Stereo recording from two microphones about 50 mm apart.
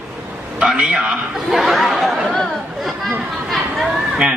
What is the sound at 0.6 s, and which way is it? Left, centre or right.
Speech, centre.